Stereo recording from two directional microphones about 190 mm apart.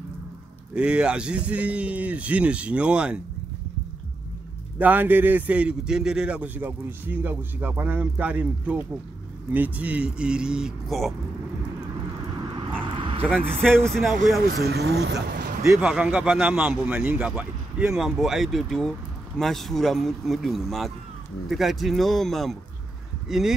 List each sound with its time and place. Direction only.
0.7 s a man's voice: 5° right (ahead or behind)
4.7 s a man's voice: 10° right (ahead or behind)
12.9 s a sound: 25° right (ahead or behind)
13.8 s a man's voice: centre (ahead or behind)
14.5 s speech: 60° right (ahead or behind)
15.6 s speech: 15° right (ahead or behind)
15.9 s a man's voice: 5° right (ahead or behind)